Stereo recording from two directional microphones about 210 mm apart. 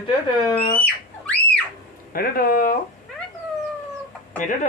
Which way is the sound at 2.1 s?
45° left (ahead or behind).